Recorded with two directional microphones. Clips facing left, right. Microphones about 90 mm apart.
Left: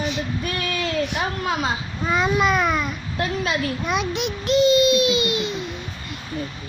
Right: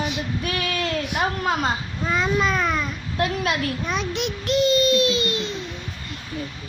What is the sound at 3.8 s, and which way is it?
A child's voice, 10° left (ahead or behind).